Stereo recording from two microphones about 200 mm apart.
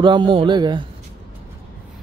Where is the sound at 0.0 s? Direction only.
25° right (ahead or behind).